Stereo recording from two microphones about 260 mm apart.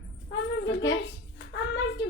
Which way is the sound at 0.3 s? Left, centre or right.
Left.